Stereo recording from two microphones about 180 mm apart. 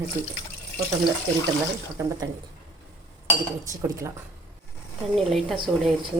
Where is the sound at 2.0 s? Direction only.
15° right (ahead or behind).